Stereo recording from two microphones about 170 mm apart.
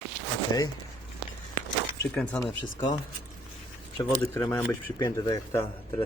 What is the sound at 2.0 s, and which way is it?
Speech, 15° left (ahead or behind).